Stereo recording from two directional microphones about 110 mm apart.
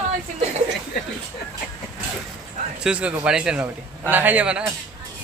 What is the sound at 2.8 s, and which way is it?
A man's voice, 10° right (ahead or behind).